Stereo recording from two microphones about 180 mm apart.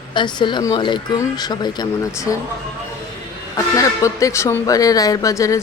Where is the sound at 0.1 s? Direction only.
25° left (ahead or behind).